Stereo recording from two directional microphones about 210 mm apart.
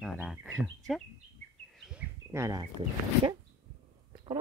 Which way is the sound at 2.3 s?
15° right (ahead or behind).